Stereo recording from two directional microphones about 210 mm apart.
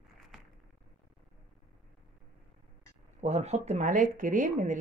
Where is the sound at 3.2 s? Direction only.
30° right (ahead or behind).